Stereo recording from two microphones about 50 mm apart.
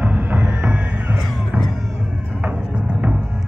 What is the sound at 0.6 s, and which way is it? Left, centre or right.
Music, right.